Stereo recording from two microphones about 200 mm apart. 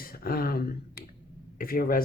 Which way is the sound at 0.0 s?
50° left (ahead or behind).